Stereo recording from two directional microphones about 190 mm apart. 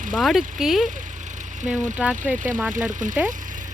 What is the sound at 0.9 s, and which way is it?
Vehicle, 40° right (ahead or behind).